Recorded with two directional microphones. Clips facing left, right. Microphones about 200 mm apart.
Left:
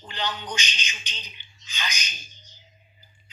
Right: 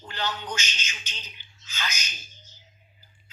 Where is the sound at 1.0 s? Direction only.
5° right (ahead or behind).